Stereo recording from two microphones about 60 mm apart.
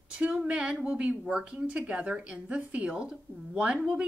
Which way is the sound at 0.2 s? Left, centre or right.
Centre.